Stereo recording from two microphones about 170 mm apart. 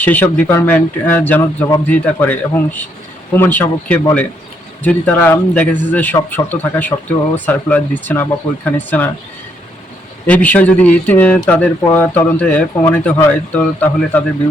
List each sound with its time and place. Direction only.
0.0 s speech: 10° left (ahead or behind)
10.2 s speech: 10° left (ahead or behind)